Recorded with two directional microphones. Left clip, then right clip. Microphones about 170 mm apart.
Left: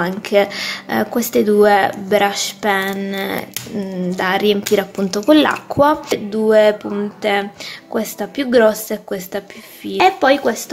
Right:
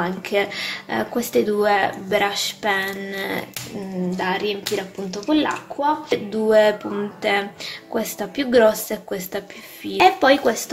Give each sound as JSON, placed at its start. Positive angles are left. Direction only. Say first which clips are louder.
{"t": 0.0, "sound": "speech", "louder": "left 6 dB", "side_deg": 15}
{"t": 4.2, "sound": "speech", "louder": "left 8 dB", "side_deg": 30}
{"t": 6.0, "sound": "a woman's voice", "louder": "left 4 dB", "side_deg": 20}